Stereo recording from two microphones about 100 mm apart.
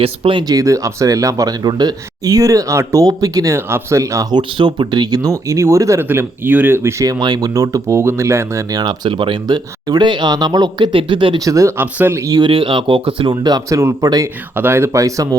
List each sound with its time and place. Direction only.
0.0 s speech: 60° right (ahead or behind)
0.4 s speech: 35° right (ahead or behind)
3.5 s speech: 25° right (ahead or behind)
4.4 s speech: 50° right (ahead or behind); by 7.1 s 25° right (ahead or behind)
7.1 s speech: 40° right (ahead or behind)
8.7 s speech: 45° right (ahead or behind); by 11.3 s 60° right (ahead or behind)
11.3 s speech: 35° right (ahead or behind)
11.8 s speech: 20° right (ahead or behind)
12.4 s speech: 60° right (ahead or behind)
13.3 s speech: 40° right (ahead or behind)
14.5 s speech: 20° right (ahead or behind)